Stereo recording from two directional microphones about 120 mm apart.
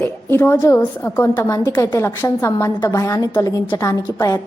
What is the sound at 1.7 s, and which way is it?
Speech, 35° left (ahead or behind).